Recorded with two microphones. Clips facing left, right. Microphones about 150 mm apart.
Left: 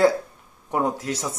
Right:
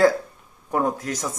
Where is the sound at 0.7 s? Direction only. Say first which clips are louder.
Right 1 dB; 15° left (ahead or behind).